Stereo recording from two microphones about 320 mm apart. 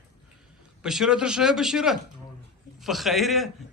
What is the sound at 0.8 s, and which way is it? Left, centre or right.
Speech, centre.